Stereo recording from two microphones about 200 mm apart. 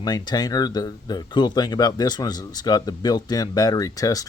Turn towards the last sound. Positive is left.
turn(degrees=15)  # may be behind; listen again after turning